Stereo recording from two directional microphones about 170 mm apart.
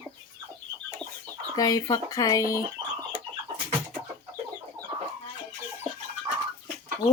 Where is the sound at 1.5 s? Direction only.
20° left (ahead or behind).